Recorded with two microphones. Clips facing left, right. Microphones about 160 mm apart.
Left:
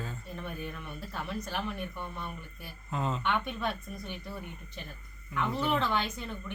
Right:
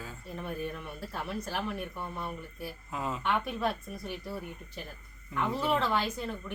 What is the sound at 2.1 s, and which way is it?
Speech, 30° right (ahead or behind).